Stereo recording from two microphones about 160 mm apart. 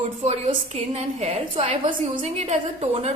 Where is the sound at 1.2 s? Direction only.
35° right (ahead or behind).